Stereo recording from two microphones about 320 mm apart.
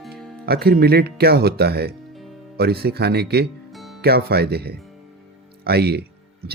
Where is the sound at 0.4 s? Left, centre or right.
Right.